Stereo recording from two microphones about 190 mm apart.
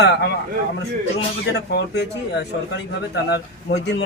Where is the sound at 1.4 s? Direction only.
60° left (ahead or behind).